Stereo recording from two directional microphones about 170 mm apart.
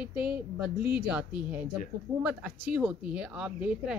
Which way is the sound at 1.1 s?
10° right (ahead or behind).